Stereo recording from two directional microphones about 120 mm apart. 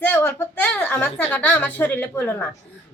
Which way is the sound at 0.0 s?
15° left (ahead or behind).